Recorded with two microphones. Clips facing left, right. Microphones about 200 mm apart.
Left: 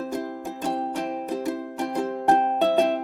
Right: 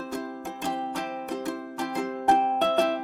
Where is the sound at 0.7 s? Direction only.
Centre (ahead or behind).